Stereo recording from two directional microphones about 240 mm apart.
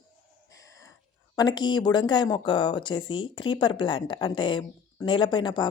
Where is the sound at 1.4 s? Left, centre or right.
Centre.